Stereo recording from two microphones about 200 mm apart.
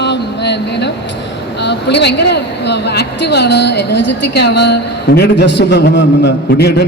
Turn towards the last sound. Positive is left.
turn(degrees=55)  # may be behind; listen again after turning